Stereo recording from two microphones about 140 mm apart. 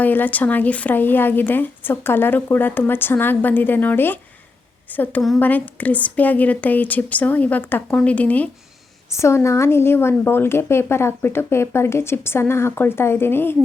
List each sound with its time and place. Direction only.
0.0 s a woman's voice: 10° left (ahead or behind)